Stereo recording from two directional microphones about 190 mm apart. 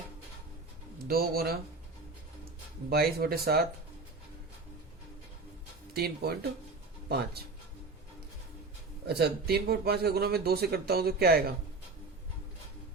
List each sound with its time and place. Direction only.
1.0 s speech: 55° right (ahead or behind)
2.9 s speech: 55° right (ahead or behind)
5.9 s speech: 55° right (ahead or behind)
9.0 s speech: 55° right (ahead or behind)